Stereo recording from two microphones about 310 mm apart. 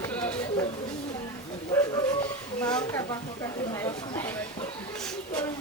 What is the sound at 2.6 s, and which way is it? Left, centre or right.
Speech, centre.